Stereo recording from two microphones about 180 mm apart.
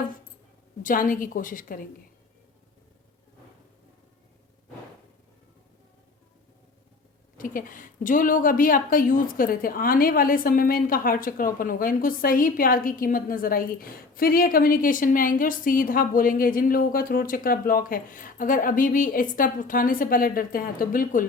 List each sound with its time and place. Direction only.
0.8 s a woman's voice: 50° left (ahead or behind)
7.3 s a woman's voice: 50° left (ahead or behind)